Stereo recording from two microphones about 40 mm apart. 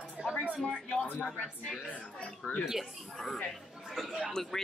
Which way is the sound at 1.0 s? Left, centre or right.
Left.